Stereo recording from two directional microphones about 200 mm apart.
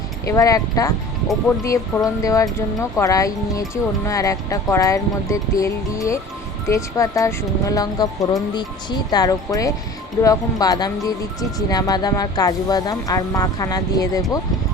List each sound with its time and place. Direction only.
0.3 s speech: 15° left (ahead or behind)
2.0 s speech: 15° left (ahead or behind)